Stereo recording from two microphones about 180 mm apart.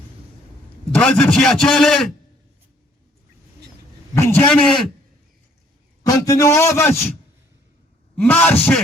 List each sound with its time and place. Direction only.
0.9 s a man's voice: 5° left (ahead or behind)
4.1 s a man's voice: 15° left (ahead or behind)
6.0 s a man's voice: 20° left (ahead or behind)
8.1 s a man's voice: 10° left (ahead or behind)